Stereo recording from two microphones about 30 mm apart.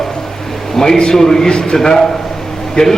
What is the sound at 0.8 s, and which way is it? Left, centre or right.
A man's voice, centre.